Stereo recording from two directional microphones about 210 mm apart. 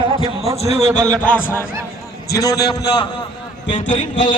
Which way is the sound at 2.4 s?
15° left (ahead or behind).